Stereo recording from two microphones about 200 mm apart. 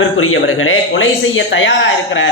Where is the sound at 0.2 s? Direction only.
90° left.